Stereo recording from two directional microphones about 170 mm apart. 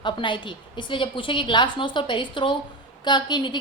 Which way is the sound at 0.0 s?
30° left (ahead or behind).